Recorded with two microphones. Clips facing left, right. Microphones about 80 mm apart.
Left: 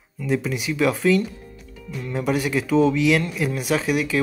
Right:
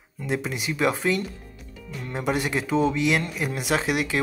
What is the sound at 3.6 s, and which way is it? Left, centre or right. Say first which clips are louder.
Speech: left 1 dB; right.